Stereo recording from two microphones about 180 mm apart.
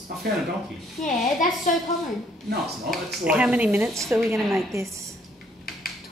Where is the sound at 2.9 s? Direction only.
5° right (ahead or behind).